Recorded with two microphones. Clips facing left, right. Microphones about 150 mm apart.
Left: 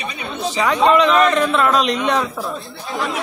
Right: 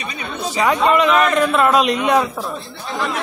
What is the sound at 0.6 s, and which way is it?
A man's voice, 5° right (ahead or behind).